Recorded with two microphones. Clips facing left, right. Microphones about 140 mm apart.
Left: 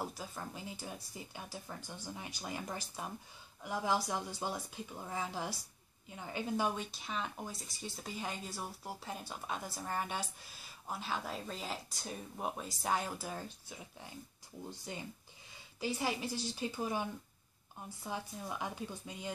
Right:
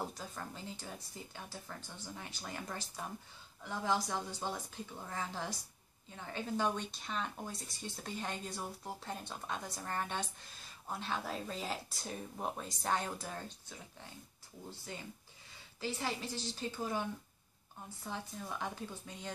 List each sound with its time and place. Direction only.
0.0 s speech: 5° left (ahead or behind)
14.9 s speech: 20° left (ahead or behind)